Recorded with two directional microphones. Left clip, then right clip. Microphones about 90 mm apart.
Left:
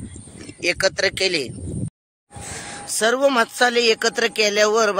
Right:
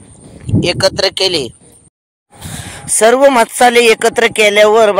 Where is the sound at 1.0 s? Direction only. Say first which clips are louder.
Right 7 dB; 20° right (ahead or behind).